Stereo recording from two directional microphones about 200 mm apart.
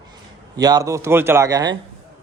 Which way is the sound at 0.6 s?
20° right (ahead or behind).